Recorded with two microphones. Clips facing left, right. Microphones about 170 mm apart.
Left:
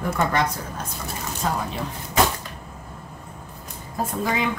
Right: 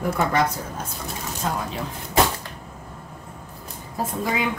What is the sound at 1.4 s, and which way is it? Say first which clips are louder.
Speech: left 1 dB; centre (ahead or behind).